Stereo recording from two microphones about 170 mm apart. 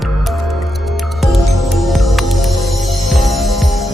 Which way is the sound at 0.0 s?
Centre (ahead or behind).